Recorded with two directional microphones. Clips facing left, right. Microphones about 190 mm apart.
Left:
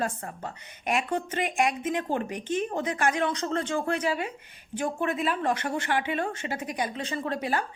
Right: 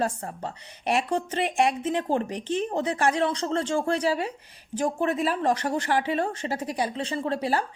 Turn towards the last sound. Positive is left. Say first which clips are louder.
# right 3 dB
turn(degrees=-30)  # may be behind; listen again after turning